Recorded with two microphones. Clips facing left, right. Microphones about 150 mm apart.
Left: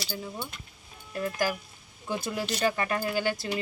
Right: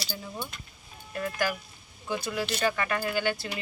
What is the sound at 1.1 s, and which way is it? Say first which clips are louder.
Speech: left 1 dB; 40° left (ahead or behind).